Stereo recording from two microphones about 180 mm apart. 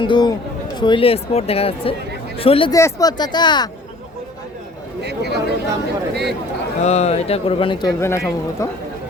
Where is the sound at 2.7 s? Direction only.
20° left (ahead or behind).